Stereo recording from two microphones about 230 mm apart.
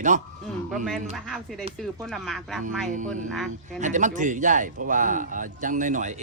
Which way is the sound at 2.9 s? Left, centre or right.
Right.